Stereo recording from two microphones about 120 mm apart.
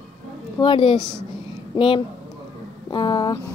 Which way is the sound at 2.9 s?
40° left (ahead or behind).